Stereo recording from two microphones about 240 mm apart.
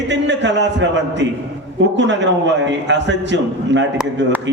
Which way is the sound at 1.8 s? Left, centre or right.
Right.